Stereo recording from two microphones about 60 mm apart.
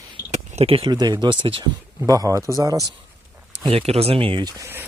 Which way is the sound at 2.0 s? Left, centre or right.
Right.